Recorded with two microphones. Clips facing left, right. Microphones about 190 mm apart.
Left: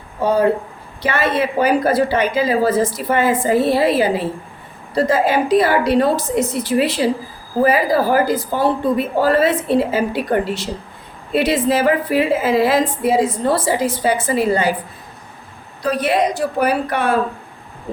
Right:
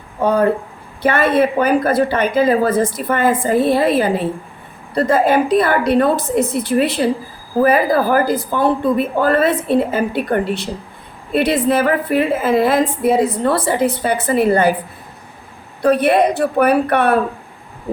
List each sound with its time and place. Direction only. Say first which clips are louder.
0.2 s a woman's voice: right 1 dB; 55° right (ahead or behind)
15.8 s a woman's voice: right 4 dB; 55° right (ahead or behind)